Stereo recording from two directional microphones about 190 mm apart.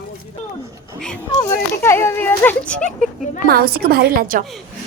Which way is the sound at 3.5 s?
55° right (ahead or behind).